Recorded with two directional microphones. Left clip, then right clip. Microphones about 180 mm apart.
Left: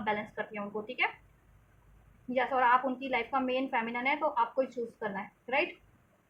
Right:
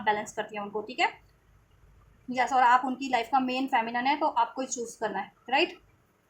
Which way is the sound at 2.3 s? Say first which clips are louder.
Right 4 dB; 35° right (ahead or behind).